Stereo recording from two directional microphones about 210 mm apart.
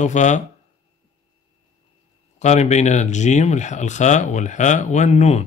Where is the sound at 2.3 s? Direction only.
35° left (ahead or behind).